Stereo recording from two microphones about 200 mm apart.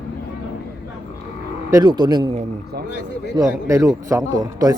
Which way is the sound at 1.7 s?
20° right (ahead or behind).